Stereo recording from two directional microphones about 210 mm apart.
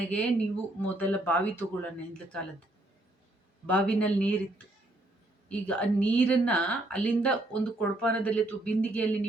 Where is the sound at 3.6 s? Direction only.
5° left (ahead or behind).